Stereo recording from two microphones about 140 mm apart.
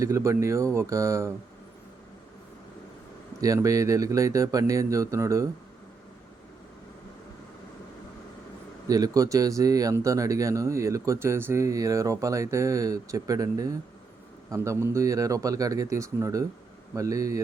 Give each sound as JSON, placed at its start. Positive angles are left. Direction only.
{"t": 0.0, "sound": "speech", "side_deg": -20}
{"t": 3.4, "sound": "speech", "side_deg": -25}
{"t": 8.9, "sound": "speech", "side_deg": -25}